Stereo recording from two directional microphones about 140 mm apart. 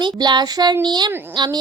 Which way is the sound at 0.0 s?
35° right (ahead or behind).